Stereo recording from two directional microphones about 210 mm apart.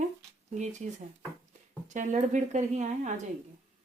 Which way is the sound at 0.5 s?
35° right (ahead or behind).